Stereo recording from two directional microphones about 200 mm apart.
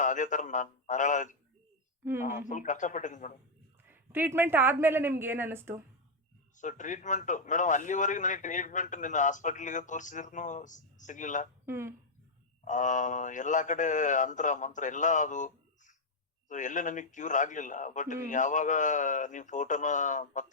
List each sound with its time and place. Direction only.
0.0 s a man's voice: 40° left (ahead or behind)
3.8 s a woman's voice: 10° right (ahead or behind)
6.6 s a man's voice: 40° left (ahead or behind)
11.6 s speech: 10° right (ahead or behind)
12.6 s a man's voice: 40° left (ahead or behind)